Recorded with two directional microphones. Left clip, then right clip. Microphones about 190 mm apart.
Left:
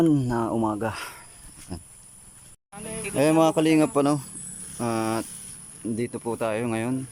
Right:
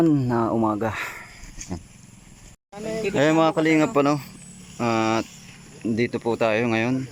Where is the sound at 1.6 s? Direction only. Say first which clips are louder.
Right 5 dB; 10° right (ahead or behind).